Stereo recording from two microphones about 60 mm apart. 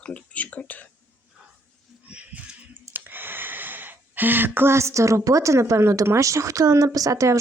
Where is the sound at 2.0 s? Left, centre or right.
Right.